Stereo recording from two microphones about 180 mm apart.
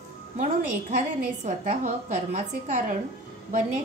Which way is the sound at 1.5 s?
40° right (ahead or behind).